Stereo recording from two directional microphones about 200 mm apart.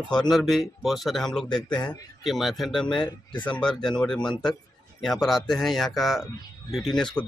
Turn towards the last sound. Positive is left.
turn(degrees=5)  # may be behind; listen again after turning